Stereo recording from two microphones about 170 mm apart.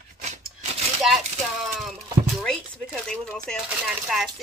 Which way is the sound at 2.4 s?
5° left (ahead or behind).